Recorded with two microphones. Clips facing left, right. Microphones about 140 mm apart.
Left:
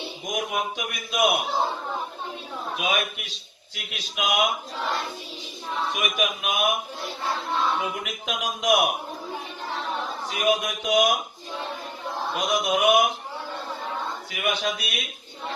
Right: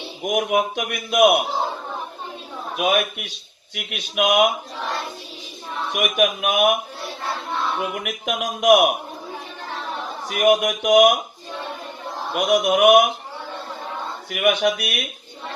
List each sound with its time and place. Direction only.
0.2 s a man's voice: 65° right (ahead or behind)
2.7 s a man's voice: 60° right (ahead or behind)
5.9 s a man's voice: 65° right (ahead or behind)
7.9 s a man's voice: 60° right (ahead or behind)
10.2 s a man's voice: 65° right (ahead or behind)
12.3 s a man's voice: 65° right (ahead or behind)
14.3 s a man's voice: 65° right (ahead or behind)